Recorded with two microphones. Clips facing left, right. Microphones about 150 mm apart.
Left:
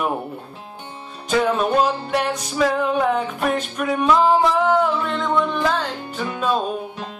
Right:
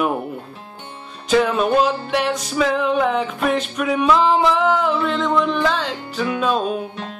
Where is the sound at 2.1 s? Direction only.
Centre (ahead or behind).